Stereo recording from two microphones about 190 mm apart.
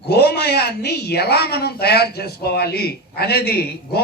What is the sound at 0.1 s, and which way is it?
A woman's voice, 60° left (ahead or behind).